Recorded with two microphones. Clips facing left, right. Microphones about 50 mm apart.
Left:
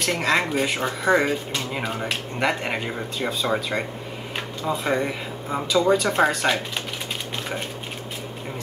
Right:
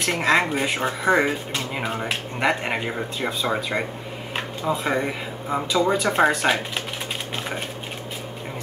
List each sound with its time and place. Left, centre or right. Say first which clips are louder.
0.0 s speech: right 2 dB; centre
4.6 s speech: even; centre